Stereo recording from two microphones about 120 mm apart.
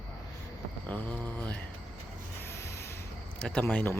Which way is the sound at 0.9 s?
15° left (ahead or behind).